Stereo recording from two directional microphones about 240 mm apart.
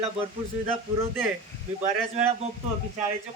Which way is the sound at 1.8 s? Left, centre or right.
Right.